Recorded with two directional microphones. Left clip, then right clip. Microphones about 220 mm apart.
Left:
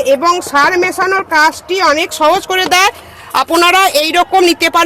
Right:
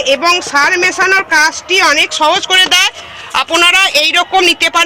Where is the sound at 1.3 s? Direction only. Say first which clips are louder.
Even; 35° left (ahead or behind).